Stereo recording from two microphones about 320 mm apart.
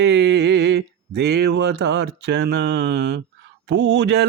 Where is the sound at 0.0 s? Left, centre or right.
Right.